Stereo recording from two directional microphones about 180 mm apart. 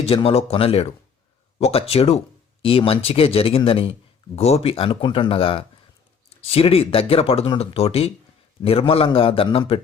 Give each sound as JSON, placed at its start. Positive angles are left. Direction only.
{"t": 0.0, "sound": "speech", "side_deg": 30}